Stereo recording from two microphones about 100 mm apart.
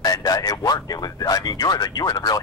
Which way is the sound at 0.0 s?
40° left (ahead or behind).